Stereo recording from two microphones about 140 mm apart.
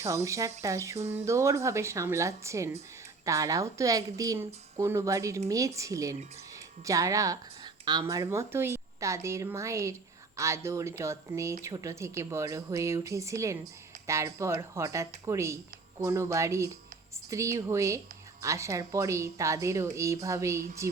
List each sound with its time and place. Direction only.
0.0 s a woman's voice: 20° right (ahead or behind)